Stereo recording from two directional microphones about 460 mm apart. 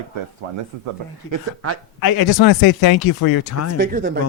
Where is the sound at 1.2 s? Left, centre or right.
Right.